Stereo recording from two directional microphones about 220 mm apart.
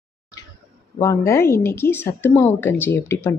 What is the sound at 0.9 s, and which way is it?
Speech, 10° left (ahead or behind).